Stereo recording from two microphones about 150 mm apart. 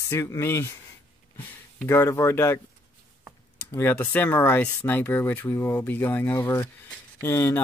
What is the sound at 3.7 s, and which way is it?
Speech, 10° left (ahead or behind).